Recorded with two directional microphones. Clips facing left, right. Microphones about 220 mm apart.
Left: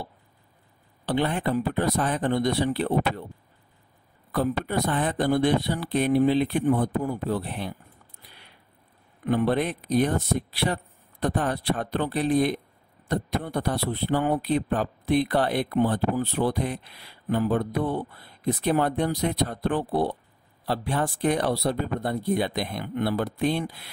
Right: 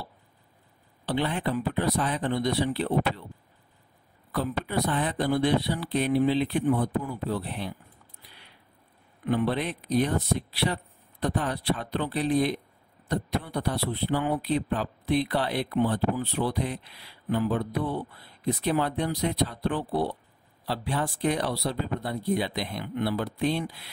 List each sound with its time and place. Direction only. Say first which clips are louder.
1.0 s a man's voice: left 3 dB; 50° left (ahead or behind)
4.3 s a man's voice: left 4 dB; 50° left (ahead or behind)
9.2 s a man's voice: left 3 dB; 50° left (ahead or behind)